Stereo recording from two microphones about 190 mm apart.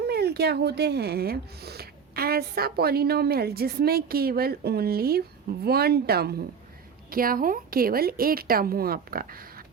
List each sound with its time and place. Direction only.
0.0 s a woman's voice: 55° right (ahead or behind)